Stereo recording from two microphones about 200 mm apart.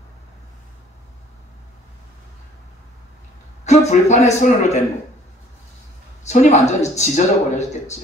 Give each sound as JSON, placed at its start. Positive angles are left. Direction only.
{"t": 3.6, "sound": "speech", "side_deg": 35}
{"t": 6.2, "sound": "speech", "side_deg": 35}